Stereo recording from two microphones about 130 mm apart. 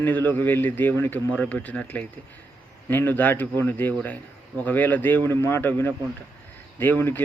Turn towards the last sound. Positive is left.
turn(degrees=15)  # may be behind; listen again after turning